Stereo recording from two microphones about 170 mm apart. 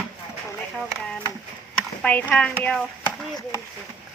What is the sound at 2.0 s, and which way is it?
Speech, 10° left (ahead or behind).